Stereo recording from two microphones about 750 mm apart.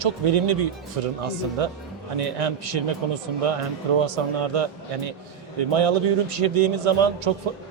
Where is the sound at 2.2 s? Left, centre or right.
Right.